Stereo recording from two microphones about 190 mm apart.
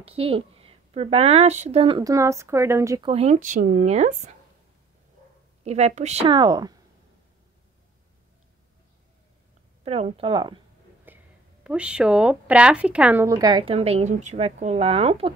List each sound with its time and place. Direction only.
0.0 s speech: 30° right (ahead or behind)
3.1 s speech: 35° right (ahead or behind)
5.6 s speech: 35° right (ahead or behind)
9.8 s speech: 30° right (ahead or behind)
11.1 s a sound: 10° right (ahead or behind)
11.6 s speech: 5° right (ahead or behind); by 15.3 s 30° right (ahead or behind)